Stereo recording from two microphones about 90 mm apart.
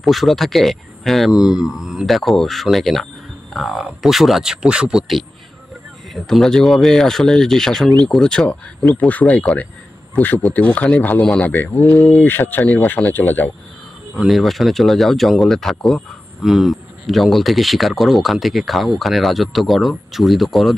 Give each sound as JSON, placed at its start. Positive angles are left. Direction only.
{"t": 0.0, "sound": "a man's voice", "side_deg": 0}
{"t": 14.1, "sound": "speech", "side_deg": 0}